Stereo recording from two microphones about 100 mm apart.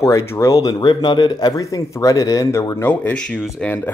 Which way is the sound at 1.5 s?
35° left (ahead or behind).